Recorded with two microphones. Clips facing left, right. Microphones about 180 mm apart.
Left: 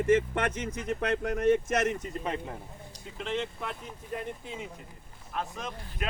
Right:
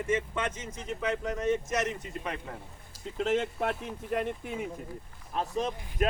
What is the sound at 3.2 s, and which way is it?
Speech, 50° right (ahead or behind).